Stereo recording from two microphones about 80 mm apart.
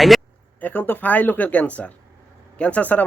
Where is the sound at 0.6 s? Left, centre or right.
Left.